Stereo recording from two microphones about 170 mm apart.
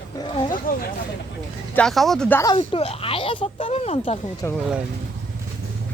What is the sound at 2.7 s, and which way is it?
Speech, 35° left (ahead or behind).